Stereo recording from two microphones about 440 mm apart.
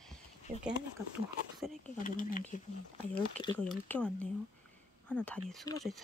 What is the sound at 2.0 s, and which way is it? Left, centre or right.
Speech, centre.